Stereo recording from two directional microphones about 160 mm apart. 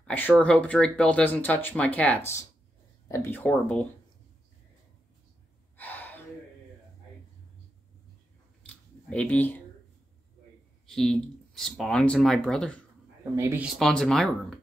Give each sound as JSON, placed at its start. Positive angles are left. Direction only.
{"t": 0.0, "sound": "speech", "side_deg": 10}
{"t": 5.8, "sound": "gasp", "side_deg": 10}
{"t": 9.1, "sound": "speech", "side_deg": 10}
{"t": 10.9, "sound": "speech", "side_deg": 0}
{"t": 13.2, "sound": "speech", "side_deg": -15}
{"t": 13.7, "sound": "speech", "side_deg": 5}